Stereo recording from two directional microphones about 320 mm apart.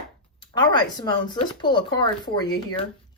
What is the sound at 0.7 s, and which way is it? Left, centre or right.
Speech, centre.